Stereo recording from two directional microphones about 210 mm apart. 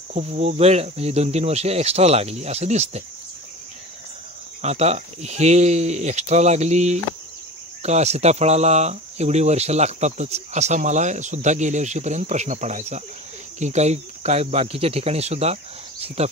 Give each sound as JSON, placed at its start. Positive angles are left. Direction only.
{"t": 0.1, "sound": "speech", "side_deg": -30}
{"t": 4.6, "sound": "speech", "side_deg": -30}